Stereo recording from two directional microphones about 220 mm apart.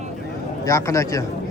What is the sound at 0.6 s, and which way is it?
Speech, 15° left (ahead or behind).